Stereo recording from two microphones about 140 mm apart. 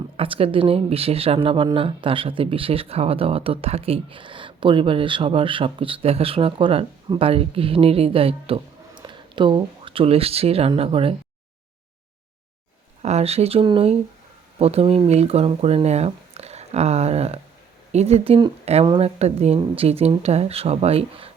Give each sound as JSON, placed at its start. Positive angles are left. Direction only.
{"t": 0.2, "sound": "speech", "side_deg": -40}
{"t": 13.0, "sound": "speech", "side_deg": -50}